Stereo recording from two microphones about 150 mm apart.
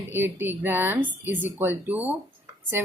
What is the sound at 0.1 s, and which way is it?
A woman's voice, 15° right (ahead or behind).